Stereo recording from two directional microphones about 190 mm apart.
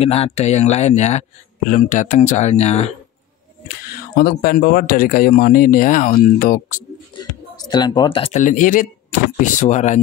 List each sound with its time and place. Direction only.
0.0 s speech: 30° left (ahead or behind)
4.2 s speech: 55° left (ahead or behind)
7.2 s speech: 20° left (ahead or behind)
8.4 s speech: 40° left (ahead or behind)